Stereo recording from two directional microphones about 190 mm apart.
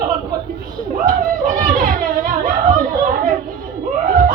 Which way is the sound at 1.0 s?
45° right (ahead or behind).